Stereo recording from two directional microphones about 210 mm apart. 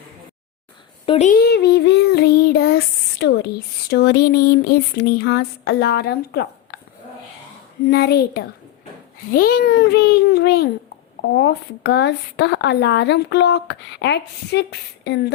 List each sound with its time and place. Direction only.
1.0 s speech: 25° left (ahead or behind)
1.3 s child singing: 50° left (ahead or behind)
3.8 s speech: 55° left (ahead or behind)
7.9 s speech: 50° left (ahead or behind)